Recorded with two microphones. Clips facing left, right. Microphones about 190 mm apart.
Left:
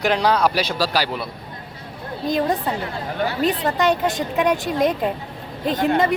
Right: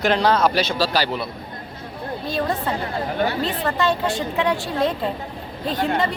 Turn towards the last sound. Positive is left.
turn(degrees=20)  # may be behind; listen again after turning